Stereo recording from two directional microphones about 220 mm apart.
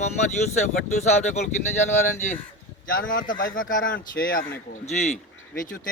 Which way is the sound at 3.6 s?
60° left (ahead or behind).